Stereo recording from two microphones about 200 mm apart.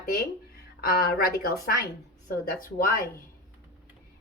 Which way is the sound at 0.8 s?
50° left (ahead or behind).